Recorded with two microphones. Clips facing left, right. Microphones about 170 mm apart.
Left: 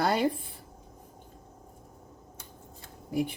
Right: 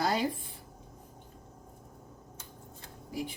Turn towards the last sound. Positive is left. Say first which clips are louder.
# left 7 dB
turn(degrees=60)  # may be behind; listen again after turning